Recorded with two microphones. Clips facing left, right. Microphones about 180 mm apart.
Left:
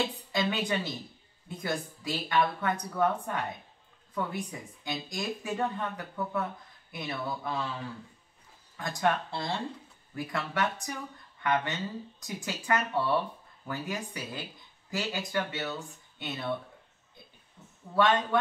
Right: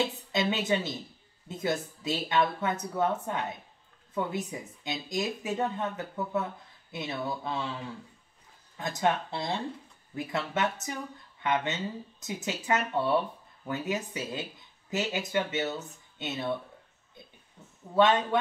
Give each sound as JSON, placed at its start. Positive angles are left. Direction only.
{"t": 0.3, "sound": "speech", "side_deg": -20}
{"t": 8.7, "sound": "speech", "side_deg": -20}
{"t": 17.9, "sound": "speech", "side_deg": -20}